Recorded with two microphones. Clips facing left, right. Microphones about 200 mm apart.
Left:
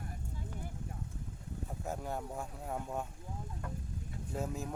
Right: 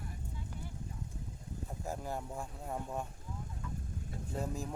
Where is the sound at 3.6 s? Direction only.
60° left (ahead or behind).